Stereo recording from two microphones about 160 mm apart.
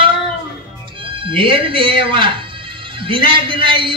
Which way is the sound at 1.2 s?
30° right (ahead or behind).